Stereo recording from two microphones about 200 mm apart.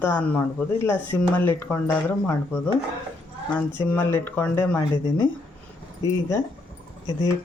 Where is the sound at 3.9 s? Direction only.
10° left (ahead or behind).